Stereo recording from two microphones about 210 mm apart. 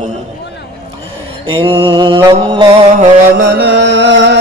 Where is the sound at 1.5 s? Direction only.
25° right (ahead or behind).